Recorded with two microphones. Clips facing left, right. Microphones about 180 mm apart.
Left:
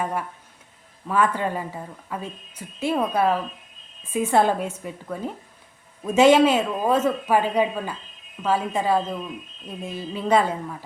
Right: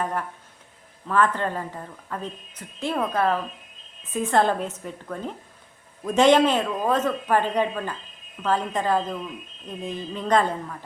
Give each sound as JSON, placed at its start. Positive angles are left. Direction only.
{"t": 0.0, "sound": "a woman's voice", "side_deg": 10}